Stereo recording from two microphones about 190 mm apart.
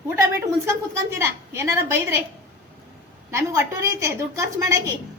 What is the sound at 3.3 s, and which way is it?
A woman's voice, 15° right (ahead or behind).